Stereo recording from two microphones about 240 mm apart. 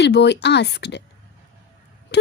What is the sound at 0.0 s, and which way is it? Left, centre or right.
Speech, left.